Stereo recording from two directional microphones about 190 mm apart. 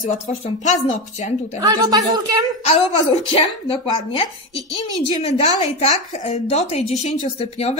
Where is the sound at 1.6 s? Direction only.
20° right (ahead or behind).